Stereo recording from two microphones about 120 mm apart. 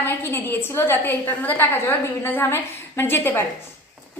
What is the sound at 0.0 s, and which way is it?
A woman's voice, 20° left (ahead or behind).